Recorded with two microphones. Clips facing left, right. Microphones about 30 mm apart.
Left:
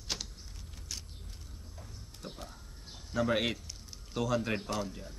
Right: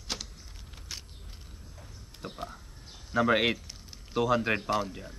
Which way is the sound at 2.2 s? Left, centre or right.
Right.